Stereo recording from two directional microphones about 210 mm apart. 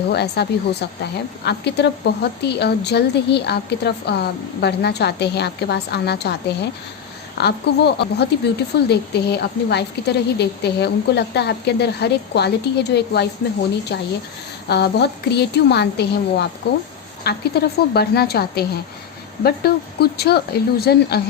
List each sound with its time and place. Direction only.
0.1 s a woman's voice: 50° left (ahead or behind)